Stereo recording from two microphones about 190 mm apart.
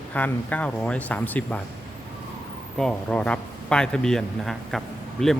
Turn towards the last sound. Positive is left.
turn(degrees=0)  # may be behind; listen again after turning